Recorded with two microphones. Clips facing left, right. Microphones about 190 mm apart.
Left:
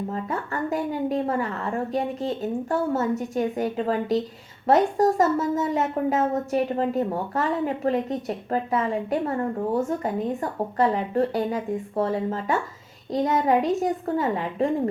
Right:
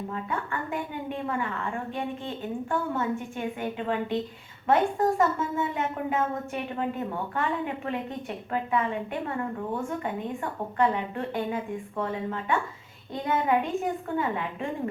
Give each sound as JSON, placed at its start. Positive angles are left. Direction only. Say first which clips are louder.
{"t": 0.1, "sound": "a woman's voice", "louder": "left 3 dB", "side_deg": 40}